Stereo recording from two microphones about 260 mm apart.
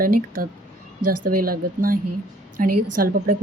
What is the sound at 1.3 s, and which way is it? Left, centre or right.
Speech, right.